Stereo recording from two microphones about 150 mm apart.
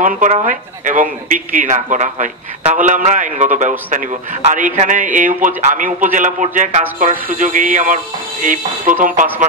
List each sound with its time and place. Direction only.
0.5 s speech: 60° right (ahead or behind)